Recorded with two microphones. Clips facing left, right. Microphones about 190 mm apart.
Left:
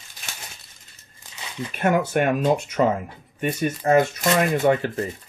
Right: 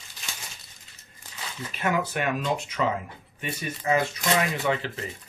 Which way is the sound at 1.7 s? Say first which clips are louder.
Left 7 dB; 55° left (ahead or behind).